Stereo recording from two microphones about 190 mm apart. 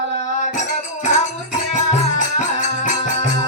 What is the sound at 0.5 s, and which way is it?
Music, 40° left (ahead or behind).